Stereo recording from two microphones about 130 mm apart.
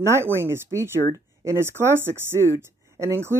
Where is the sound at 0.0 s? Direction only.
20° right (ahead or behind).